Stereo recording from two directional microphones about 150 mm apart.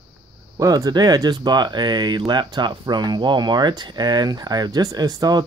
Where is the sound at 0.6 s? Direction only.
25° right (ahead or behind).